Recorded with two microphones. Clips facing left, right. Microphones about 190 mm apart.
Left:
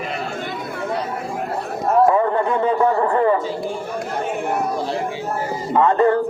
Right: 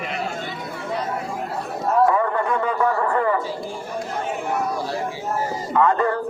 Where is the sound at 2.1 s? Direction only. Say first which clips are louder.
Left 3 dB; 25° left (ahead or behind).